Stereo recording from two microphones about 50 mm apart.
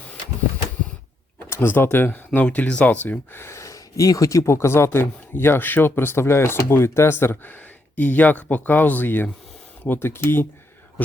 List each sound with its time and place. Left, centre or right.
1.5 s speech: left
3.3 s speech: left
5.4 s speech: left
7.1 s speech: left
9.8 s speech: left